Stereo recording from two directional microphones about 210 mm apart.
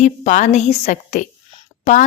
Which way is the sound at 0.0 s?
35° left (ahead or behind).